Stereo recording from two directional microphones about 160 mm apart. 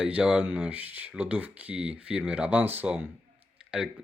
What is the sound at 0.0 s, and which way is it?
A man's voice, 5° right (ahead or behind).